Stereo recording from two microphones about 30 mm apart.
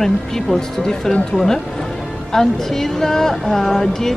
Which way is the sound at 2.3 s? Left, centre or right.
Centre.